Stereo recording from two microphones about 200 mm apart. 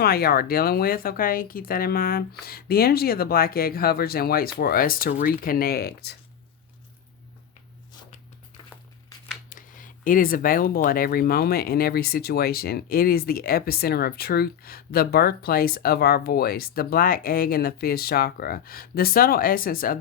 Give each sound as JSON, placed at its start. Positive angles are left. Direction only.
{"t": 0.0, "sound": "speech", "side_deg": 50}
{"t": 9.5, "sound": "speech", "side_deg": 40}